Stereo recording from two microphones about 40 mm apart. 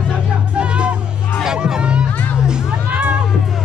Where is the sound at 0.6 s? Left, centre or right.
Right.